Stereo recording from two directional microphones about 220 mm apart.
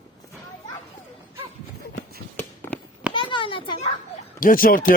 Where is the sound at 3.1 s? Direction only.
20° left (ahead or behind).